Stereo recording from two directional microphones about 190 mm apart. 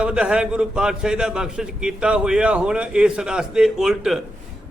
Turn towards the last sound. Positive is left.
turn(degrees=0)  # may be behind; listen again after turning